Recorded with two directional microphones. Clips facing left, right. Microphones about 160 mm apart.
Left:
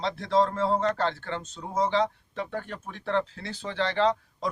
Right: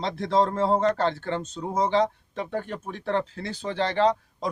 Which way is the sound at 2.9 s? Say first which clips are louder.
Even; 45° right (ahead or behind).